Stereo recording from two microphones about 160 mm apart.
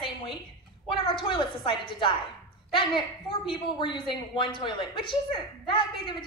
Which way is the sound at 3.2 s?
30° left (ahead or behind).